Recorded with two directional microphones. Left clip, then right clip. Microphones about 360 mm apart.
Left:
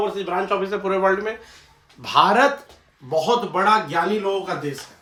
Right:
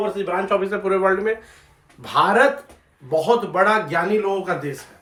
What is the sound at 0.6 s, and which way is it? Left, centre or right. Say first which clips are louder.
Speech: right 1 dB; centre.